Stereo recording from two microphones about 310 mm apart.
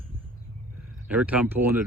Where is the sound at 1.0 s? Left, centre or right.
Centre.